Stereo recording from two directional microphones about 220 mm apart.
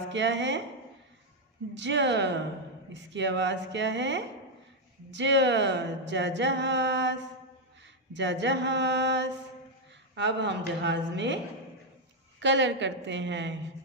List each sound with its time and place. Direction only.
0.1 s a woman's voice: 55° right (ahead or behind)
1.7 s a woman's voice: 55° right (ahead or behind)
12.4 s speech: 55° right (ahead or behind)